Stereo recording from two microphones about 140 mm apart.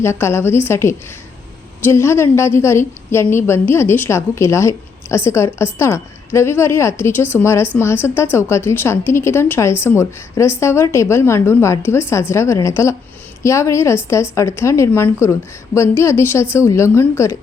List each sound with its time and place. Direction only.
0.0 s a woman's voice: 20° left (ahead or behind)